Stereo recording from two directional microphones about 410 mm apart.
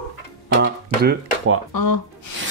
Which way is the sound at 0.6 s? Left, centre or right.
Right.